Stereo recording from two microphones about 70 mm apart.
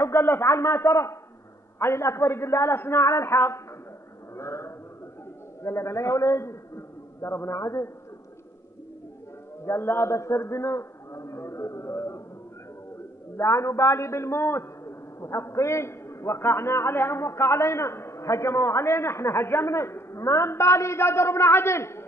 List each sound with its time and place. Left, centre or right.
0.0 s a man's voice: left
9.7 s a sound: left
13.4 s a man's voice: left